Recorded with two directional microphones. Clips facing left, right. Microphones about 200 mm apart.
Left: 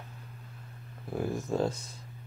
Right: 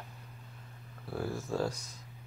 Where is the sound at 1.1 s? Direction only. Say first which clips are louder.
Left 4 dB; 20° left (ahead or behind).